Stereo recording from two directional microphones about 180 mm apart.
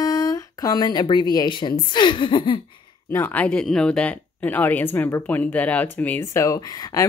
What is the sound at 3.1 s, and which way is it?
Speech, 10° left (ahead or behind).